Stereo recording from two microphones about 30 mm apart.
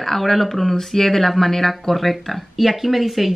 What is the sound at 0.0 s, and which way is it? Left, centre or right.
Speech, centre.